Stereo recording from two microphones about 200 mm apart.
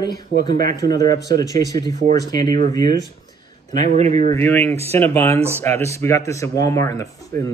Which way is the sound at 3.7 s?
35° right (ahead or behind).